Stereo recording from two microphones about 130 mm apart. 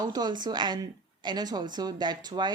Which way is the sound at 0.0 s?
30° right (ahead or behind).